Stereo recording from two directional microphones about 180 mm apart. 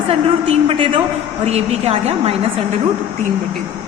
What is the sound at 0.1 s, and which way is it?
A woman's voice, 35° right (ahead or behind).